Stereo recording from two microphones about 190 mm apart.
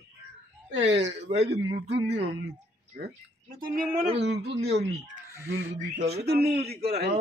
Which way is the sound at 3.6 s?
55° right (ahead or behind).